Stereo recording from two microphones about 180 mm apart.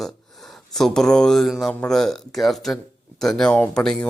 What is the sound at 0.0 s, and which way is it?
Speech, centre (ahead or behind).